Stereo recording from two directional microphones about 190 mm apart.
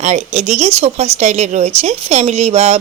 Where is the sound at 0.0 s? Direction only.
35° right (ahead or behind).